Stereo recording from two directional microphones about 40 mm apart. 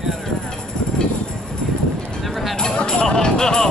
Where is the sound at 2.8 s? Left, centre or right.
Left.